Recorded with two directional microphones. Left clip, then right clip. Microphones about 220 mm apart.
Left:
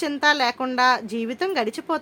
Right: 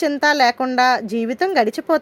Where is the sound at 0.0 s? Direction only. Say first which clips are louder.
Right 5 dB; 20° right (ahead or behind).